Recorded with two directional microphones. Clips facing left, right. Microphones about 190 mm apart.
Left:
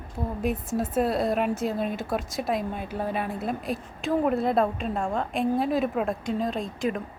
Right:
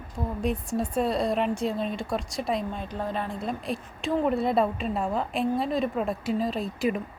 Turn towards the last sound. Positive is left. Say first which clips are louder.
# right 1 dB
turn(degrees=-5)  # may be behind; listen again after turning